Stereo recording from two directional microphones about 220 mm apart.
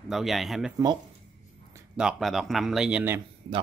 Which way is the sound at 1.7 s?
5° right (ahead or behind).